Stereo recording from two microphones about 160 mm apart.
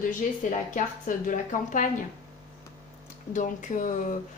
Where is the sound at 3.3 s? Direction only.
50° left (ahead or behind).